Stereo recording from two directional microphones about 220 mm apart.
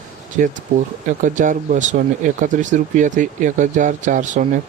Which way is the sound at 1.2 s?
35° right (ahead or behind).